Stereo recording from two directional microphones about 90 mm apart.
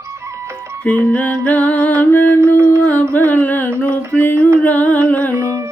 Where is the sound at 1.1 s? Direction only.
15° left (ahead or behind).